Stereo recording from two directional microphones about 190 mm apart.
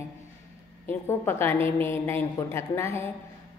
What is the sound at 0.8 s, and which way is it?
A woman's voice, 10° left (ahead or behind).